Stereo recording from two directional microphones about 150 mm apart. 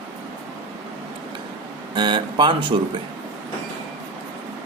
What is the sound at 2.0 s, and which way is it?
Speech, 30° right (ahead or behind).